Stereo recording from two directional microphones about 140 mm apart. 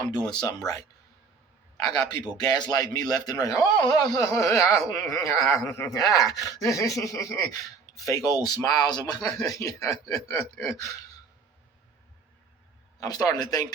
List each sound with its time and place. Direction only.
0.1 s a man's voice: 30° left (ahead or behind)
1.9 s a man's voice: 30° left (ahead or behind)
13.0 s a man's voice: 25° left (ahead or behind)